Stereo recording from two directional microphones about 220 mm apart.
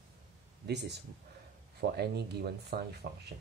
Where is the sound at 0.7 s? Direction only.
50° right (ahead or behind).